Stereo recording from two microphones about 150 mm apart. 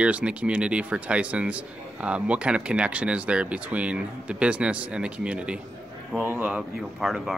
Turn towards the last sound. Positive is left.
turn(degrees=0)  # may be behind; listen again after turning